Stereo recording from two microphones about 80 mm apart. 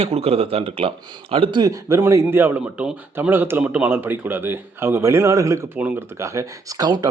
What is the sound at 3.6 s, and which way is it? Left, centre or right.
A man's voice, centre.